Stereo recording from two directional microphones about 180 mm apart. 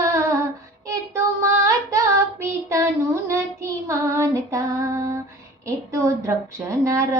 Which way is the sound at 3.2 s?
15° right (ahead or behind).